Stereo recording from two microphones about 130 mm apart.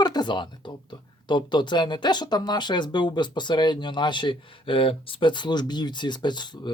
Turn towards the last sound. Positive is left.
turn(degrees=35)  # may be behind; listen again after turning